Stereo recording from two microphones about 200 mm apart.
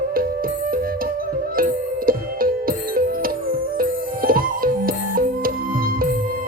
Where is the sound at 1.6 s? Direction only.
45° right (ahead or behind).